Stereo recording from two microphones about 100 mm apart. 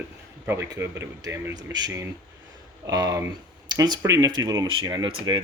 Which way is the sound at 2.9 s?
40° right (ahead or behind).